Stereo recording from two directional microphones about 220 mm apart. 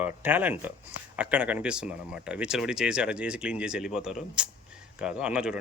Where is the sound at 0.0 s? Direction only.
5° right (ahead or behind).